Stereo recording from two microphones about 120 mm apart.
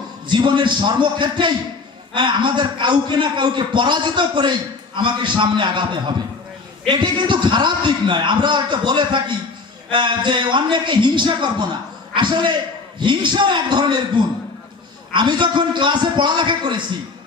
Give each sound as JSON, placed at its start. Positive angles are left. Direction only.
{"t": 0.3, "sound": "a man's voice", "side_deg": -40}